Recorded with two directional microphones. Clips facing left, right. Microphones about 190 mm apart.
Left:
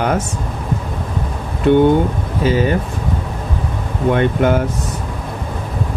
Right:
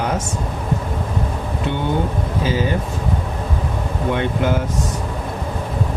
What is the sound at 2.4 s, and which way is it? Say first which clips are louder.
Speech: left 5 dB; 60° left (ahead or behind).